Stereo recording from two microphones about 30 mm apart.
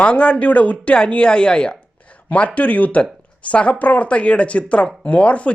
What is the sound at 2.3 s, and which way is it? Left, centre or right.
Speech, left.